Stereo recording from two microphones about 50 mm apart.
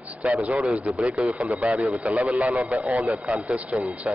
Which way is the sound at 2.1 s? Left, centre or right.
Right.